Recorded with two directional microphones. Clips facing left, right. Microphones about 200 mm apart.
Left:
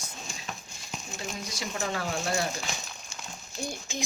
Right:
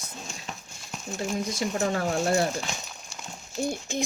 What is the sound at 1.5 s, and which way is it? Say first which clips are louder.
Speech: right 4 dB; 50° right (ahead or behind).